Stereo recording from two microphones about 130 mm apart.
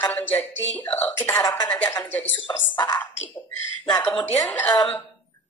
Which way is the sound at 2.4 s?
35° left (ahead or behind).